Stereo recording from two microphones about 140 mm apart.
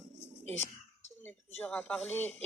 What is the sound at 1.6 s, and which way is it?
Speech, 10° left (ahead or behind).